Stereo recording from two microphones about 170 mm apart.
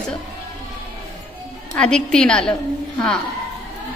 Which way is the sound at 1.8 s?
5° left (ahead or behind).